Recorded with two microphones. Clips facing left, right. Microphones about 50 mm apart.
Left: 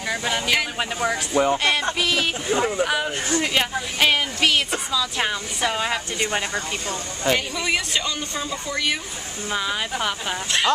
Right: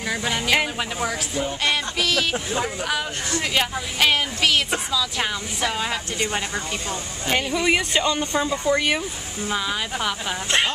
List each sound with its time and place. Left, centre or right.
0.1 s speech: centre
6.9 s speech: centre
9.5 s speech: centre